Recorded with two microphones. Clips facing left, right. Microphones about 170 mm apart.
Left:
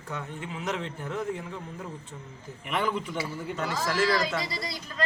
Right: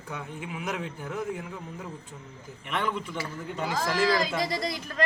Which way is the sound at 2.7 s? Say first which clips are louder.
Left 2 dB; centre (ahead or behind).